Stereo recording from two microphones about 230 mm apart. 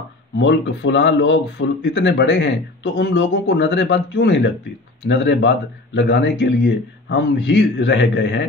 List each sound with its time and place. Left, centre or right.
0.4 s speech: left